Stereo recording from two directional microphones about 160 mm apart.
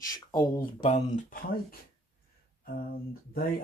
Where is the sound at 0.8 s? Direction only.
50° left (ahead or behind).